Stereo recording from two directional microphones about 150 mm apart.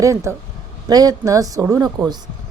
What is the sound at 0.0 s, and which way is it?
A woman's voice, 20° right (ahead or behind).